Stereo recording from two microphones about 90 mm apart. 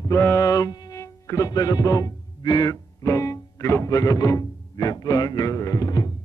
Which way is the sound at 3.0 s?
35° left (ahead or behind).